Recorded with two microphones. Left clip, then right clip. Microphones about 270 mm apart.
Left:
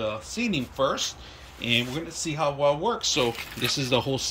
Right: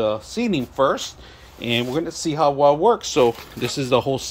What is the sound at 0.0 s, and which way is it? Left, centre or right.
Speech, right.